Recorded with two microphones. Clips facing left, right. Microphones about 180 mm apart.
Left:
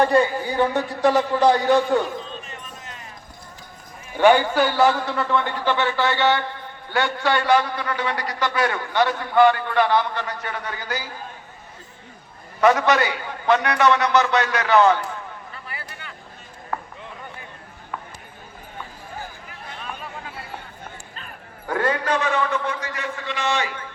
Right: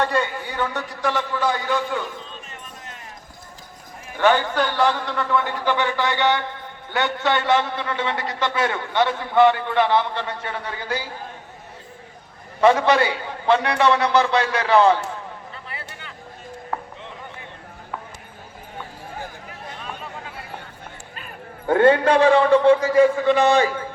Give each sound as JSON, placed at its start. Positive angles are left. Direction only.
{"t": 0.0, "sound": "a man's voice", "side_deg": 30}
{"t": 4.2, "sound": "a man's voice", "side_deg": 10}
{"t": 12.5, "sound": "a man's voice", "side_deg": -30}
{"t": 16.7, "sound": "a sound", "side_deg": -30}
{"t": 21.7, "sound": "a man's voice", "side_deg": -25}